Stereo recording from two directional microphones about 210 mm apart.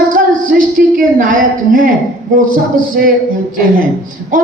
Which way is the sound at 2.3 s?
40° right (ahead or behind).